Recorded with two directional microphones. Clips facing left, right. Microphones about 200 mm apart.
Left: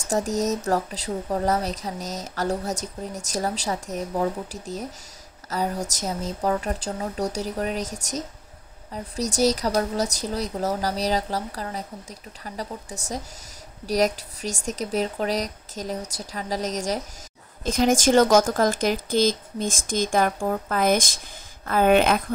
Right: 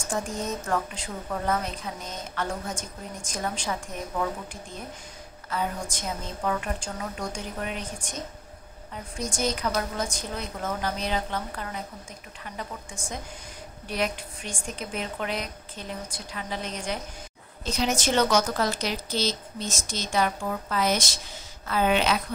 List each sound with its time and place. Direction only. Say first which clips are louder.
0.1 s speech: left 7 dB; 40° left (ahead or behind)
8.9 s speech: left 6 dB; 35° left (ahead or behind)